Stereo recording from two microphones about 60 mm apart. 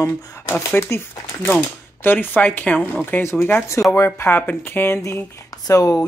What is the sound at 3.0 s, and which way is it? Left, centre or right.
Speech, left.